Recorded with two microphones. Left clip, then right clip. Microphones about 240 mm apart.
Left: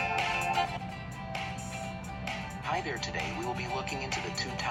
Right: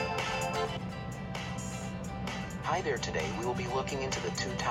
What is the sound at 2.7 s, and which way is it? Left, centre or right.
Speech, centre.